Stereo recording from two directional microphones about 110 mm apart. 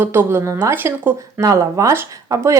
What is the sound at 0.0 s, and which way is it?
Speech, 20° right (ahead or behind).